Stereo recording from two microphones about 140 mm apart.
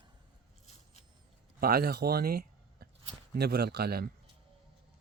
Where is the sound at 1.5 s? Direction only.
90° right.